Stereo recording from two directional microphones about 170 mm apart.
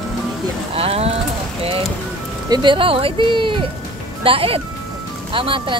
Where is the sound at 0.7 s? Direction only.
35° right (ahead or behind).